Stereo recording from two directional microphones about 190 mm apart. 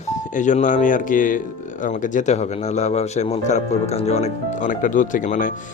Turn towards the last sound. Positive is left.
turn(degrees=45)  # may be behind; listen again after turning